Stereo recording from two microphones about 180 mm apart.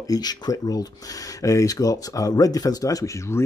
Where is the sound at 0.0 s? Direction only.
20° left (ahead or behind).